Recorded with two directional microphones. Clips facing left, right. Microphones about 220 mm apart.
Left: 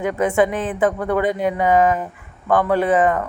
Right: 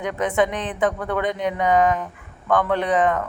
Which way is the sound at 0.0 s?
Centre (ahead or behind).